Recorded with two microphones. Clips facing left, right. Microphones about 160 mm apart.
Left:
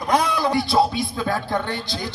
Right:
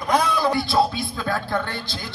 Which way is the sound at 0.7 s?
15° left (ahead or behind).